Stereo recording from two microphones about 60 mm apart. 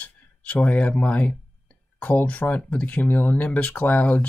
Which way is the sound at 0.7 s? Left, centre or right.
Left.